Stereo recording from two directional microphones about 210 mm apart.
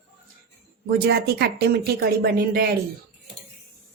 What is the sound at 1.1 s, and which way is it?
Speech, 50° right (ahead or behind).